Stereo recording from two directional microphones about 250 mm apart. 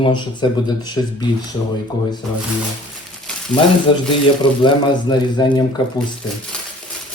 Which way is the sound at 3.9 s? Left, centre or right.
Centre.